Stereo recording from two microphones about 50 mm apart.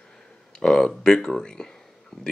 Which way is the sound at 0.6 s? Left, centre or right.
Centre.